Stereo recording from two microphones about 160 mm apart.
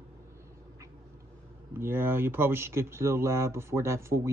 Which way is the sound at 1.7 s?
15° right (ahead or behind).